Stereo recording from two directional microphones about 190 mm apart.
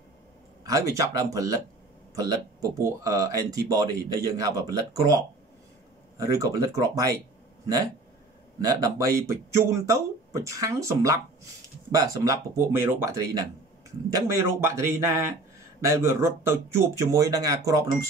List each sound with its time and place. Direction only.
0.7 s speech: 15° right (ahead or behind)
8.5 s speech: 15° right (ahead or behind)
12.3 s speech: 15° right (ahead or behind)